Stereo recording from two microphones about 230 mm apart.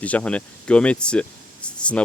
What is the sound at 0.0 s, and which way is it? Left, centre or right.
Speech, centre.